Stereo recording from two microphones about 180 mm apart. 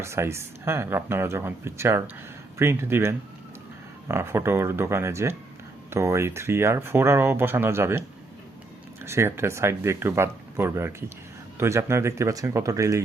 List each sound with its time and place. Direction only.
0.0 s speech: 15° right (ahead or behind)
9.0 s speech: 15° right (ahead or behind)